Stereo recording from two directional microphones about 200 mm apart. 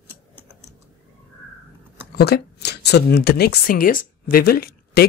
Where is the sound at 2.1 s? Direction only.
55° left (ahead or behind).